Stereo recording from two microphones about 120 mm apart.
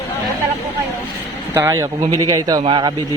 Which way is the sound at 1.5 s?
20° right (ahead or behind).